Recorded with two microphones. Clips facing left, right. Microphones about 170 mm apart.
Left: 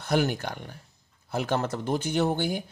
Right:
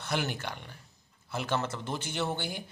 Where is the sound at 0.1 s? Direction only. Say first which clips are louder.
Left 8 dB; 45° left (ahead or behind).